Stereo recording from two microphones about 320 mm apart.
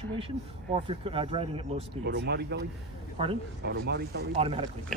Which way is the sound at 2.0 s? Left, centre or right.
Right.